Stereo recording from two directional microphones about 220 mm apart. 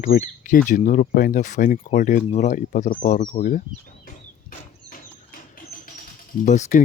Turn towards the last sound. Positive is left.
turn(degrees=30)  # may be behind; listen again after turning